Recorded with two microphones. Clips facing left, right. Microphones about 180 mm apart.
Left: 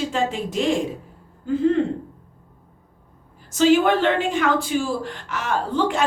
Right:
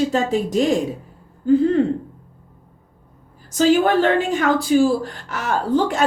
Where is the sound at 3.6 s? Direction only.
40° right (ahead or behind).